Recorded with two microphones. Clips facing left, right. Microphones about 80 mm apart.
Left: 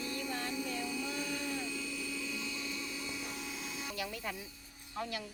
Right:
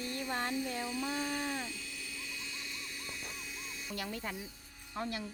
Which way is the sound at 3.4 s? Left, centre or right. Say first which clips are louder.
Left 3 dB; left.